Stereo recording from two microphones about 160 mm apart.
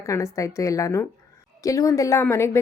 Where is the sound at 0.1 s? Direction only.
20° left (ahead or behind).